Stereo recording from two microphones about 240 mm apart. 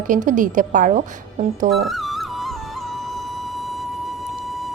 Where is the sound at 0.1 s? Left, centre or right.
Right.